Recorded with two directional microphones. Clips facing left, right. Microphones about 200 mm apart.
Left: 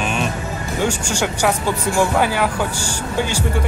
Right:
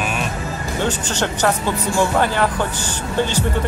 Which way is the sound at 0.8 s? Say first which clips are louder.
Left 1 dB; 10° left (ahead or behind).